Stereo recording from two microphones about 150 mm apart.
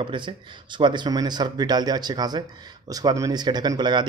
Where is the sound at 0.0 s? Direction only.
30° right (ahead or behind).